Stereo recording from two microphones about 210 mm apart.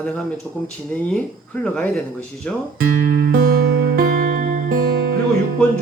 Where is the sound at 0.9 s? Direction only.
5° left (ahead or behind).